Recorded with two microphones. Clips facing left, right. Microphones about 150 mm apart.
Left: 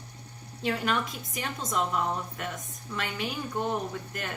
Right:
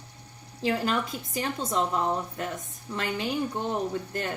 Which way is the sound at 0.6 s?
30° right (ahead or behind).